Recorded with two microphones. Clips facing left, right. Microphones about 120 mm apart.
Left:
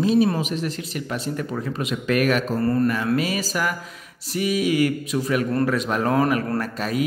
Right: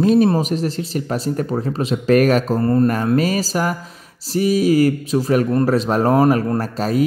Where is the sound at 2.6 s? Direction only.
25° right (ahead or behind).